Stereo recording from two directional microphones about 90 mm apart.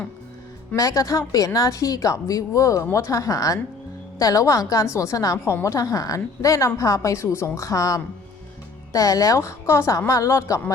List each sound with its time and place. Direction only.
0.8 s a woman's voice: 40° left (ahead or behind)